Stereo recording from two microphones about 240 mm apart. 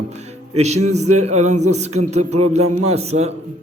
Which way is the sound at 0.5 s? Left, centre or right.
Right.